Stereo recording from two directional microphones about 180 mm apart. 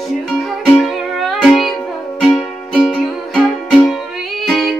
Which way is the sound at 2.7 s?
5° left (ahead or behind).